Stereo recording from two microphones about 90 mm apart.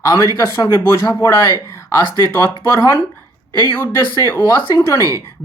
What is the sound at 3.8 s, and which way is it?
Speech, 25° left (ahead or behind).